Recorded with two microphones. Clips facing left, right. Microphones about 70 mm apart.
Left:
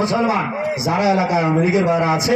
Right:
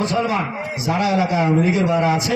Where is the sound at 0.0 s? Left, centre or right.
Left.